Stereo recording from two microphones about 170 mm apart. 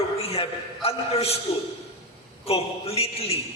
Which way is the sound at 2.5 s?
35° left (ahead or behind).